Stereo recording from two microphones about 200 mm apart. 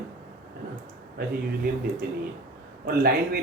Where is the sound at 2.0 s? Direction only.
55° right (ahead or behind).